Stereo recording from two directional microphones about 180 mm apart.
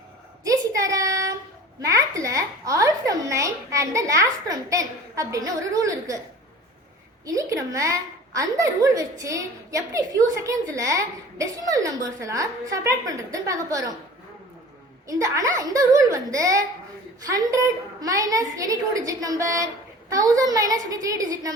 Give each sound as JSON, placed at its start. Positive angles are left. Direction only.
{"t": 0.4, "sound": "child singing", "side_deg": -20}
{"t": 1.8, "sound": "a woman's voice", "side_deg": -20}
{"t": 7.3, "sound": "a woman's voice", "side_deg": -20}
{"t": 15.0, "sound": "a woman's voice", "side_deg": -20}